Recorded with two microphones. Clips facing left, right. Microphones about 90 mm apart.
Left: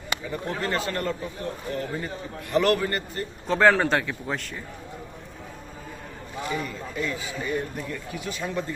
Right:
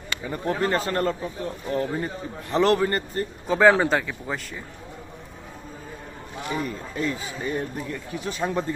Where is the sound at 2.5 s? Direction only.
30° right (ahead or behind).